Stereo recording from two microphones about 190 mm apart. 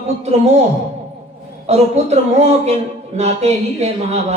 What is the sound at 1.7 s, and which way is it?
Speech, 35° right (ahead or behind).